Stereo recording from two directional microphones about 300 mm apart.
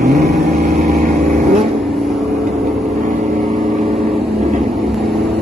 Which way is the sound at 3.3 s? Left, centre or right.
Centre.